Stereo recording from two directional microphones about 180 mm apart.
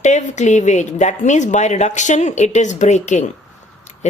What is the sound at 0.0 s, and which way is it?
A woman's voice, 40° left (ahead or behind).